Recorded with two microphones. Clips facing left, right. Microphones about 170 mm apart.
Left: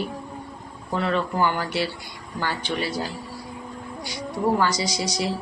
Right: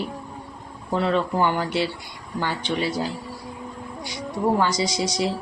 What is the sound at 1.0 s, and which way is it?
Speech, 20° right (ahead or behind).